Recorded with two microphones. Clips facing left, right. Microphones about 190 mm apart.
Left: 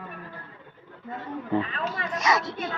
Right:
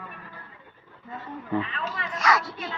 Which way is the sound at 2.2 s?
20° left (ahead or behind).